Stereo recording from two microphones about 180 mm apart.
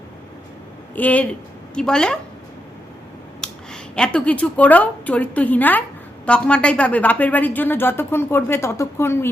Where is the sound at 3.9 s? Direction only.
5° left (ahead or behind).